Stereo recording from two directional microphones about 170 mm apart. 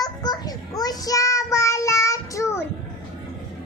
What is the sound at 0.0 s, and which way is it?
Child singing, 25° left (ahead or behind).